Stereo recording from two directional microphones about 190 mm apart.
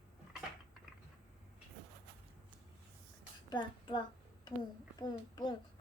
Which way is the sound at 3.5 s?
25° left (ahead or behind).